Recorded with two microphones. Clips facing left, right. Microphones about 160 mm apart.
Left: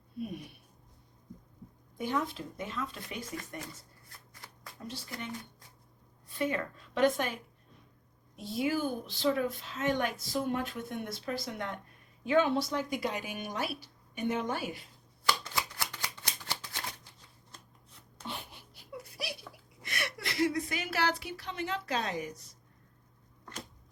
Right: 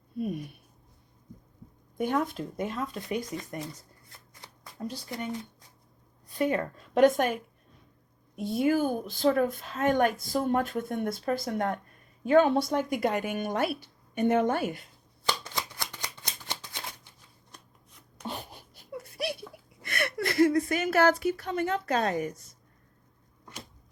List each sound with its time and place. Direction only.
2.0 s a woman's voice: 55° right (ahead or behind)
4.8 s a woman's voice: 45° right (ahead or behind)
6.2 s a woman's voice: 40° right (ahead or behind)
8.4 s a woman's voice: 55° right (ahead or behind)
15.8 s shuffling cards: 15° right (ahead or behind)
18.3 s a sound: 40° right (ahead or behind)
19.2 s a sound: 55° right (ahead or behind)